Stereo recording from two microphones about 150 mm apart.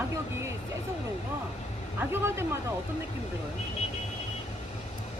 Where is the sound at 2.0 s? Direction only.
15° right (ahead or behind).